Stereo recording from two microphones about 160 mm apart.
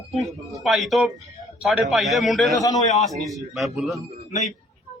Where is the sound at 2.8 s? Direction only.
45° left (ahead or behind).